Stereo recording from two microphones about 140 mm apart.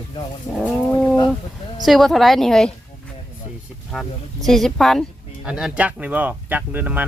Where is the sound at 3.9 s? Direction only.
Centre (ahead or behind).